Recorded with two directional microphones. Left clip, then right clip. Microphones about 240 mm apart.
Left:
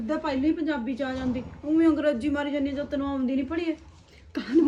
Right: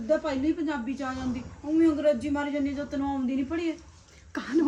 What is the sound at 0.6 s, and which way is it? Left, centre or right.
A woman's voice, centre.